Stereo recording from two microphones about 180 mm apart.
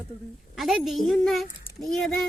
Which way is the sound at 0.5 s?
Centre (ahead or behind).